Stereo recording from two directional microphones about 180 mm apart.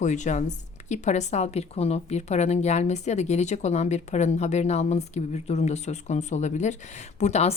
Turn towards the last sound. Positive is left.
turn(degrees=40)  # may be behind; listen again after turning